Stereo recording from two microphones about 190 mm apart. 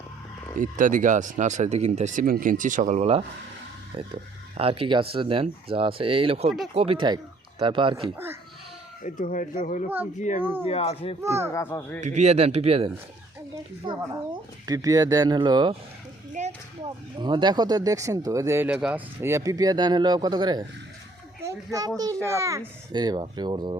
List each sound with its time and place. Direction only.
0.5 s speech: 45° right (ahead or behind); by 8.1 s 25° right (ahead or behind)
9.0 s speech: 45° left (ahead or behind)
11.2 s speech: 15° right (ahead or behind)
11.5 s speech: 10° left (ahead or behind)
11.9 s speech: 40° right (ahead or behind); by 15.7 s 25° right (ahead or behind)
16.4 s a sound: 40° right (ahead or behind)
16.8 s speech: 25° right (ahead or behind)